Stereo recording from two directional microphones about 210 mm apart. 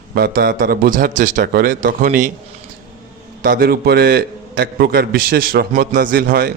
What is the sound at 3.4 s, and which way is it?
A man's voice, 45° right (ahead or behind).